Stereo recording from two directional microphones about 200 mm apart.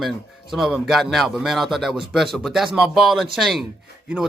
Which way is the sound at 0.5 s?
Centre (ahead or behind).